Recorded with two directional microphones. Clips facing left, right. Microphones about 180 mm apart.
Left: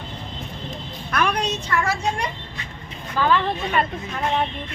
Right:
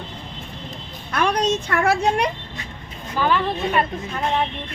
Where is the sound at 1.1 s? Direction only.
30° right (ahead or behind); by 2.3 s 65° right (ahead or behind).